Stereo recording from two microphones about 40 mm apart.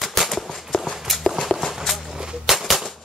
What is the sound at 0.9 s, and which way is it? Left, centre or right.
Clip-clop, centre.